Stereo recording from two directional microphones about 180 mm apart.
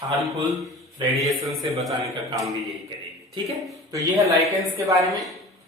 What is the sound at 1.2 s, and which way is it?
Speech, centre (ahead or behind).